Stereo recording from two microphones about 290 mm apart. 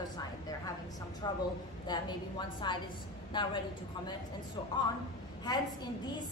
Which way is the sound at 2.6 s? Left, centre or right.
Centre.